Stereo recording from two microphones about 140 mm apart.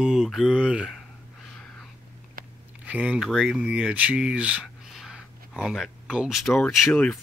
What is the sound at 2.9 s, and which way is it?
Speech, 10° right (ahead or behind).